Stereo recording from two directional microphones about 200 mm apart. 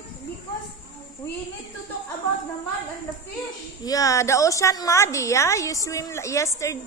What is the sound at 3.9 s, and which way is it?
A woman's voice, 15° left (ahead or behind).